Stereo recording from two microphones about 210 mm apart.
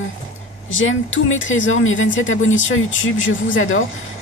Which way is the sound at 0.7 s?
70° left (ahead or behind).